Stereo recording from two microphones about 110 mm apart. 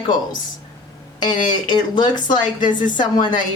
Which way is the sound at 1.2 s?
40° left (ahead or behind).